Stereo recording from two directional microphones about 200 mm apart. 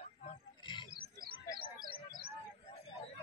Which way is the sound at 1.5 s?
45° right (ahead or behind).